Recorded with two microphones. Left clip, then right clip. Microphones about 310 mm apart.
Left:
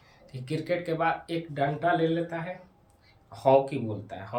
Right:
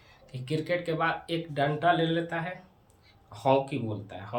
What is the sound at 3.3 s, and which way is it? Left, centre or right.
Speech, centre.